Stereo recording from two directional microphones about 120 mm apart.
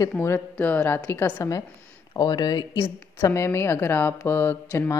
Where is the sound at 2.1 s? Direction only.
35° left (ahead or behind).